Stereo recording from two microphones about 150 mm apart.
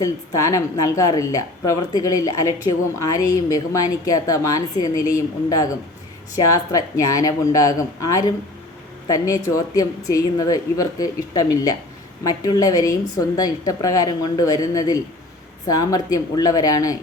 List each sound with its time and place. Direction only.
0.0 s a woman's voice: 20° left (ahead or behind)